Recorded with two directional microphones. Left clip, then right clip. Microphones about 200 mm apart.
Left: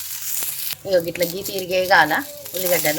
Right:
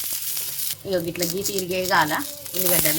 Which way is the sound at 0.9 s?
50° left (ahead or behind).